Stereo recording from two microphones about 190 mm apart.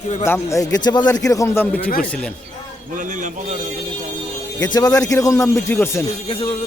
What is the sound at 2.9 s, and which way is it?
Speech, 40° right (ahead or behind).